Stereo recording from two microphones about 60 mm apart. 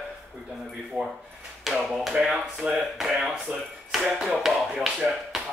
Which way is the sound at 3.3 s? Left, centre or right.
Centre.